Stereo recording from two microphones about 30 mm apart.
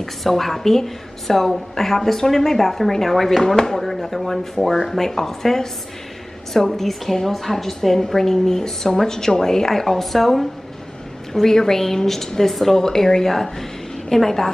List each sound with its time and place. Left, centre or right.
0.0 s a woman's voice: centre
6.7 s a woman's voice: centre
11.3 s a woman's voice: centre